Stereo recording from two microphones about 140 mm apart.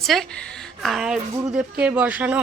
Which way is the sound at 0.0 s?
Centre (ahead or behind).